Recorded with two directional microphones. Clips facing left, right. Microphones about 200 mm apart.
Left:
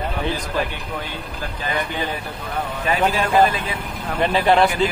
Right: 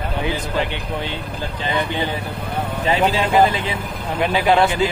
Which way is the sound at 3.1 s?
20° right (ahead or behind).